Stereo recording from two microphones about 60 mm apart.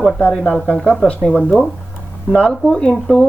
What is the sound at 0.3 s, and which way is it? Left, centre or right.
Speech, centre.